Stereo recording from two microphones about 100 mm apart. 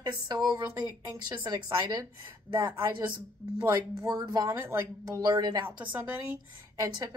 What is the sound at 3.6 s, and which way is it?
Speech, 35° right (ahead or behind).